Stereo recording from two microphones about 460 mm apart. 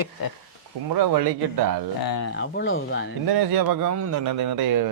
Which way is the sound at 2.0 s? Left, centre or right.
Left.